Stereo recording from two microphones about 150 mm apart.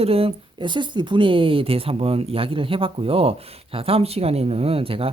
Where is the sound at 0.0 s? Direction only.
40° right (ahead or behind).